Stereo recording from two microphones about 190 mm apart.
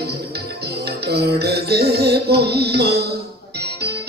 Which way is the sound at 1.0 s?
55° right (ahead or behind).